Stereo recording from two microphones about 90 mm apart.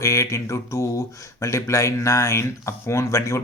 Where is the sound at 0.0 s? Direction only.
35° left (ahead or behind).